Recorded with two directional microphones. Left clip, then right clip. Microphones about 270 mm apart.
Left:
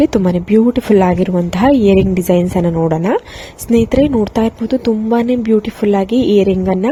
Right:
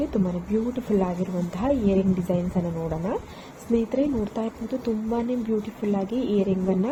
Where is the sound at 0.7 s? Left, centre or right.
Left.